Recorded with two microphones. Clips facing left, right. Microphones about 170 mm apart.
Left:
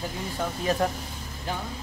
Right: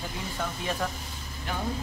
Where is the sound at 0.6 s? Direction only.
40° left (ahead or behind).